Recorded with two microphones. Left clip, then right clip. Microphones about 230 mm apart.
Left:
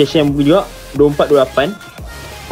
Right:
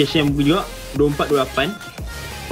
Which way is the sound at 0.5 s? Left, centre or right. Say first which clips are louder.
Left 7 dB; right.